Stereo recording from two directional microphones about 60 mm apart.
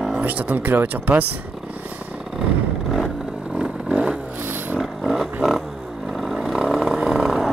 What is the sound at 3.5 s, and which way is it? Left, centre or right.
Vehicle, centre.